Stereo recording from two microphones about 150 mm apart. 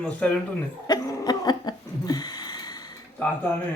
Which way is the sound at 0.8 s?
25° left (ahead or behind).